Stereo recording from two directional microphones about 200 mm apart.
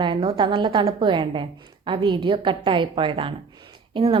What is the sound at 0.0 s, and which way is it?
A woman's voice, 25° right (ahead or behind).